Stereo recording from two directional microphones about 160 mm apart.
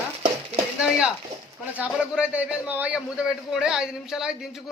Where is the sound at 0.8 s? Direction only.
5° right (ahead or behind).